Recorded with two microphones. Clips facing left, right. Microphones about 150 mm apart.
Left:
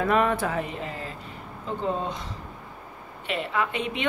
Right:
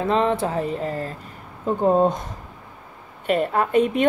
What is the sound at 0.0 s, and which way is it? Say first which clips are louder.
Speech: right 2 dB; 25° right (ahead or behind).